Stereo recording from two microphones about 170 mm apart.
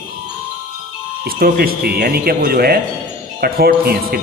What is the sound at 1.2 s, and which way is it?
A man's voice, 60° right (ahead or behind).